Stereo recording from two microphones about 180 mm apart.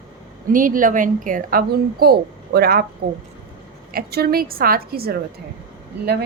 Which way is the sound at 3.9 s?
60° right (ahead or behind).